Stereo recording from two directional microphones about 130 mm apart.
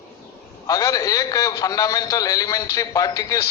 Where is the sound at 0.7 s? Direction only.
30° left (ahead or behind).